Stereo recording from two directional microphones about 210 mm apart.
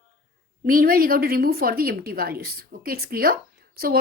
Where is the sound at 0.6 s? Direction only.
45° right (ahead or behind).